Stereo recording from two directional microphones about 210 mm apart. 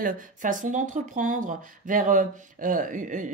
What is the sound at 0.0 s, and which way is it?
Speech, 40° right (ahead or behind).